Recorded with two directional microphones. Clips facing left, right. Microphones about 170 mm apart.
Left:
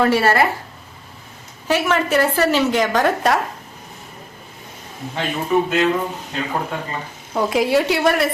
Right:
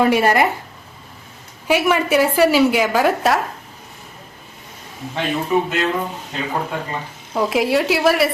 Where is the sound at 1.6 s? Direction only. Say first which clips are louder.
Right 2 dB; 10° right (ahead or behind).